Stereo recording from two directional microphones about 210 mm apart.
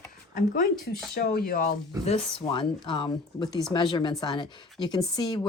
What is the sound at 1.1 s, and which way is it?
Speech, 45° left (ahead or behind).